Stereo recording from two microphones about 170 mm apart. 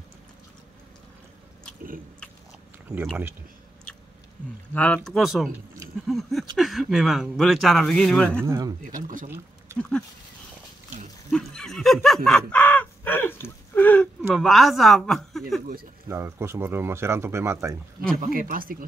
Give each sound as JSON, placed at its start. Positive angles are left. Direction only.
{"t": 4.7, "sound": "speech", "side_deg": 5}
{"t": 8.5, "sound": "speech", "side_deg": -20}
{"t": 8.8, "sound": "speech", "side_deg": -50}
{"t": 9.8, "sound": "speech", "side_deg": 5}
{"t": 11.2, "sound": "speech", "side_deg": 5}
{"t": 16.1, "sound": "speech", "side_deg": -15}
{"t": 18.1, "sound": "speech", "side_deg": -55}